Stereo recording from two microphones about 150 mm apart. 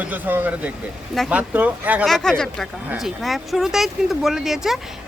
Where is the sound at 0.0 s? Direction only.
10° right (ahead or behind).